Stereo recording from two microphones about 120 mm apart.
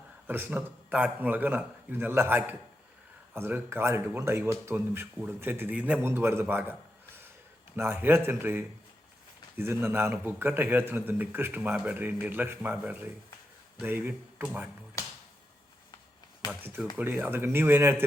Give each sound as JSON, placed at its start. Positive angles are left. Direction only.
{"t": 0.3, "sound": "speech", "side_deg": -15}
{"t": 7.8, "sound": "speech", "side_deg": -20}
{"t": 9.8, "sound": "speech", "side_deg": -20}
{"t": 16.5, "sound": "speech", "side_deg": -15}